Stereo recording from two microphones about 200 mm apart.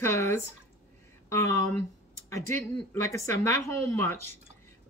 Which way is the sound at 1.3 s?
15° left (ahead or behind).